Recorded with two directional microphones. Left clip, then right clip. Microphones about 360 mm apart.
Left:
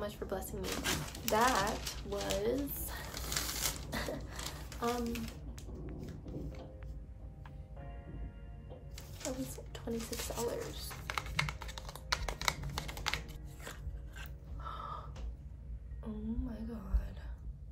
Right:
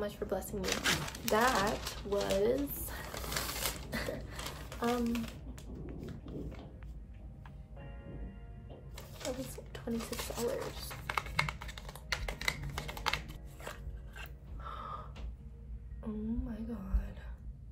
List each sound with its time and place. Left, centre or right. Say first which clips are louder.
0.0 s speech: right 3 dB; centre
0.6 s speech: right 5 dB; right
1.3 s speech: right 1 dB; centre
1.9 s speech: right 5 dB; centre
2.4 s a sound: right 4 dB; centre
4.6 s a sound: right 2 dB; centre
8.9 s a sound: right 2 dB; centre
9.7 s a sound: right 2 dB; centre
9.9 s speech: right 1 dB; centre
11.1 s typing: right 3 dB; centre
12.7 s scissors: right 2 dB; centre
16.0 s speech: right 2 dB; centre